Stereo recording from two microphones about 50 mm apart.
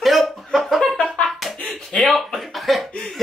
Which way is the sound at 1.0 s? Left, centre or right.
Left.